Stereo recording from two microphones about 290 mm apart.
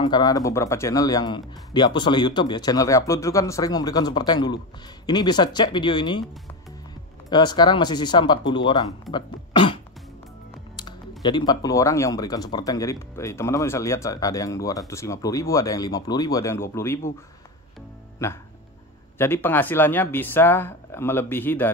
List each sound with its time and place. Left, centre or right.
0.0 s speech: centre
7.2 s speech: centre
10.8 s speech: centre
18.2 s speech: centre